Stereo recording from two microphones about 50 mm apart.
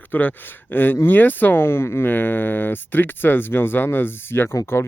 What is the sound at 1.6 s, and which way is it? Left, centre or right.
Speech, left.